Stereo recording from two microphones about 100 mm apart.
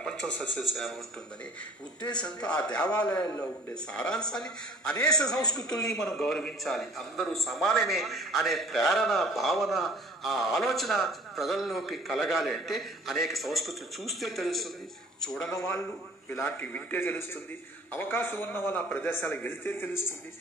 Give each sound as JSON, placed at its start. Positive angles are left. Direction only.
{"t": 0.0, "sound": "speech", "side_deg": 5}
{"t": 2.1, "sound": "a man's voice", "side_deg": 10}
{"t": 3.1, "sound": "a man's voice", "side_deg": 40}
{"t": 3.9, "sound": "a man's voice", "side_deg": 5}
{"t": 4.9, "sound": "a man's voice", "side_deg": 35}
{"t": 5.9, "sound": "speech", "side_deg": 5}
{"t": 15.5, "sound": "a man's voice", "side_deg": 30}